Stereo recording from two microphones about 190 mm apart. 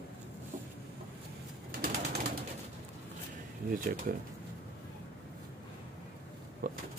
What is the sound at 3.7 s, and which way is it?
Speech, 45° right (ahead or behind).